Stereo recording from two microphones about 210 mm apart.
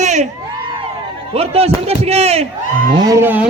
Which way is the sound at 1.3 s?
30° right (ahead or behind).